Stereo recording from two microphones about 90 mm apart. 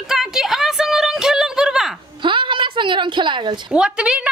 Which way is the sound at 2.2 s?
65° right (ahead or behind).